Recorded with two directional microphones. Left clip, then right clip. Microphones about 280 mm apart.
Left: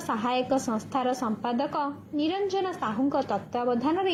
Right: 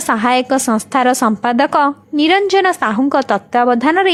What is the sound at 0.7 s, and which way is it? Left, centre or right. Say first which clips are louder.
Speech: right 14 dB; right.